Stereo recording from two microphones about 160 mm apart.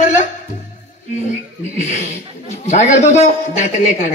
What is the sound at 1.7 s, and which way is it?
A man's voice, 50° left (ahead or behind).